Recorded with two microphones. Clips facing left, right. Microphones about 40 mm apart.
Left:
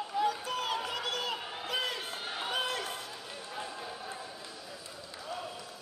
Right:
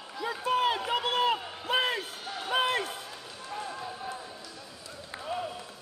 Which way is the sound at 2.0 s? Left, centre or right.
Left.